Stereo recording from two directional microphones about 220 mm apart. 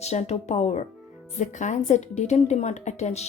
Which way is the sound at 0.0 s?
30° left (ahead or behind).